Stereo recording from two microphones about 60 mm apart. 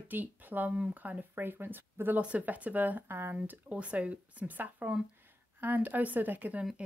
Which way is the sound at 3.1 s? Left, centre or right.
Right.